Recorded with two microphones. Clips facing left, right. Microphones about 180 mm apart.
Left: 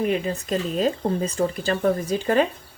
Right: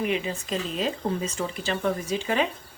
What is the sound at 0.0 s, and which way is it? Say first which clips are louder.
Speech: left 4 dB; 45° left (ahead or behind).